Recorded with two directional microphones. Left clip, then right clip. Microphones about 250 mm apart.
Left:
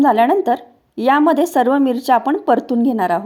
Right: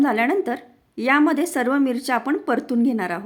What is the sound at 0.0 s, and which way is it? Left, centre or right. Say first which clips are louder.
A woman's voice: left 7 dB; centre.